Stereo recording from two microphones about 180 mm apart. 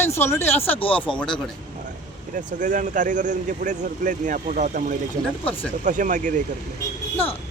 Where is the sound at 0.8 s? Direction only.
30° left (ahead or behind).